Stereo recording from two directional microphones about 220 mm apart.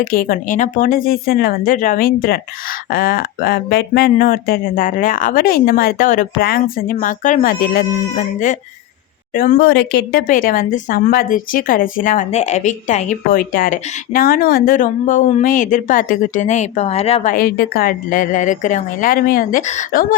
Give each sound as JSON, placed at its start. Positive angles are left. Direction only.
{"t": 0.0, "sound": "speech", "side_deg": 40}
{"t": 9.3, "sound": "speech", "side_deg": 40}
{"t": 17.3, "sound": "speech", "side_deg": 40}